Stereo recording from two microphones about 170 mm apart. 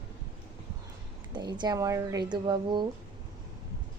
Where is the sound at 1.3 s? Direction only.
25° right (ahead or behind).